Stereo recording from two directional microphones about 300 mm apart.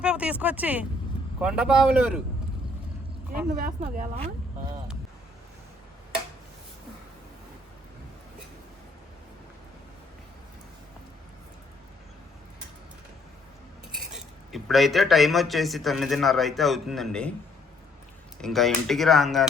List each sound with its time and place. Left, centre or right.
0.0 s speech: centre
3.5 s a woman's voice: right
13.9 s speech: centre
18.4 s speech: centre